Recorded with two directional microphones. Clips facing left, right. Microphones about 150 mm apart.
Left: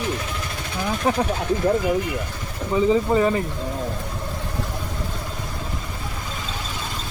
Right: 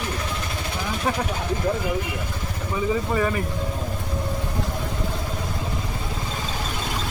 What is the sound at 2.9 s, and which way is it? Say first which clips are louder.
Speech: left 3 dB; 20° left (ahead or behind).